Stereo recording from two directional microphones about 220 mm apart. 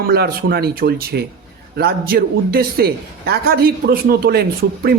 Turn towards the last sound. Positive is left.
turn(degrees=-45)  # may be behind; listen again after turning